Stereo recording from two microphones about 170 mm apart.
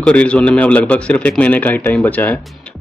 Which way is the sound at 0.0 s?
5° left (ahead or behind).